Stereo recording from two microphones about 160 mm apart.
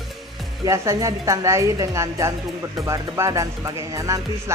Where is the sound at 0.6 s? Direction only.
20° right (ahead or behind).